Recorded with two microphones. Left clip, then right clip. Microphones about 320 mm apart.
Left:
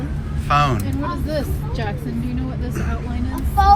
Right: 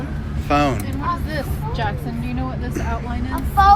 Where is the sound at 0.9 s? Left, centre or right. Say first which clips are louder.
Right 1 dB; right.